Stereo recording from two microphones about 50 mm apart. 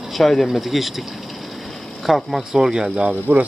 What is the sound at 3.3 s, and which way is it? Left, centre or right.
Speech, right.